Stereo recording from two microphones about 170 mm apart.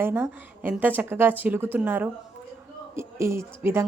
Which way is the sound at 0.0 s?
15° right (ahead or behind).